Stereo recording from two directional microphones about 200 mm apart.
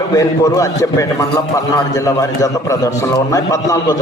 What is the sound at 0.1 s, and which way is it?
A man's voice, 15° left (ahead or behind).